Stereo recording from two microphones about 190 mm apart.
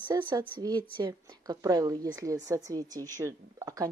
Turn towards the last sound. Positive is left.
turn(degrees=-15)  # may be behind; listen again after turning